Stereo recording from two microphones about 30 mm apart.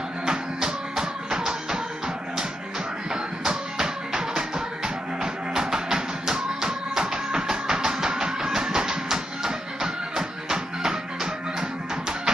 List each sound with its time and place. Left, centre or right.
0.3 s music: right
3.4 s music: right